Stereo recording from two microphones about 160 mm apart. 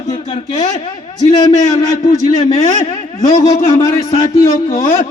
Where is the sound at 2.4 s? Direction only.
45° left (ahead or behind).